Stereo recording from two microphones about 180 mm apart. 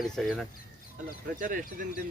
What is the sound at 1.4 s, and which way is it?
Speech, 50° right (ahead or behind).